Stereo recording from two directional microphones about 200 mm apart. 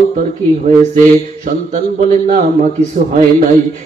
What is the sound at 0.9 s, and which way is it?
A man's voice, 40° right (ahead or behind).